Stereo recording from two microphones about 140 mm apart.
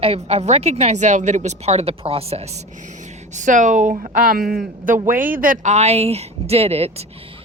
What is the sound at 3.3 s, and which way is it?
Speech, 65° right (ahead or behind).